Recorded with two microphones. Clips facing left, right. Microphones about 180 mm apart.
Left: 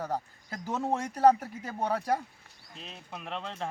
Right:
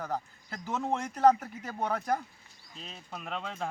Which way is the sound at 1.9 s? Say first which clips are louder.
Left 2 dB; 30° left (ahead or behind).